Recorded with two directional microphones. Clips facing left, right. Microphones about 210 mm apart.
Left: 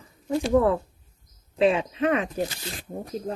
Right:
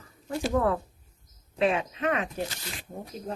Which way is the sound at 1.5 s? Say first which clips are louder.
Left 4 dB; 30° left (ahead or behind).